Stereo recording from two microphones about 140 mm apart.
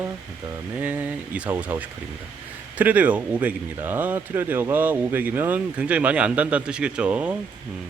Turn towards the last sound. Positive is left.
turn(degrees=-10)  # may be behind; listen again after turning